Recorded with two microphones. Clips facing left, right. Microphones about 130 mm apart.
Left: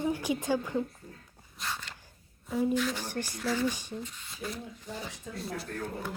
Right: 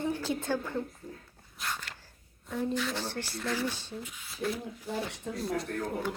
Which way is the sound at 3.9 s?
5° right (ahead or behind).